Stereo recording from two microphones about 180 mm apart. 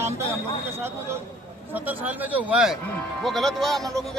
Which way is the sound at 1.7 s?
10° right (ahead or behind).